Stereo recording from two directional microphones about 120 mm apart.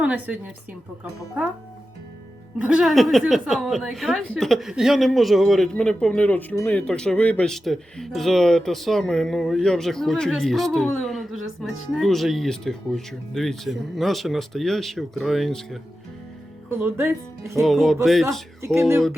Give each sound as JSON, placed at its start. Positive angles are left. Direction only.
{"t": 0.0, "sound": "a woman's voice", "side_deg": -10}
{"t": 2.6, "sound": "a woman's voice", "side_deg": -10}
{"t": 16.6, "sound": "speech", "side_deg": -20}
{"t": 17.6, "sound": "a woman's voice", "side_deg": 0}
{"t": 18.6, "sound": "speech", "side_deg": -20}